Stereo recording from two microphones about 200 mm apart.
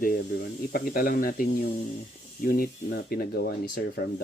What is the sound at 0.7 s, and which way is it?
Speech, 45° left (ahead or behind).